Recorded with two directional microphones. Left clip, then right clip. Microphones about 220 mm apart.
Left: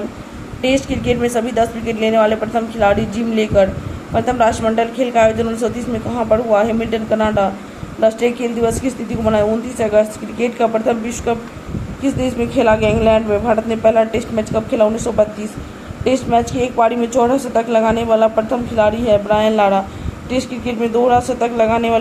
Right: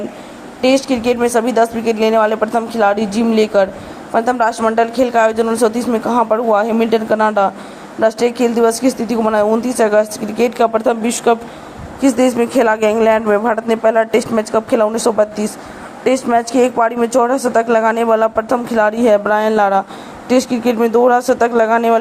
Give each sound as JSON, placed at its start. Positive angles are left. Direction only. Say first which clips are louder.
{"t": 0.6, "sound": "a woman's voice", "louder": "right 4 dB", "side_deg": -25}
{"t": 16.6, "sound": "a woman's voice", "louder": "right 2 dB", "side_deg": -25}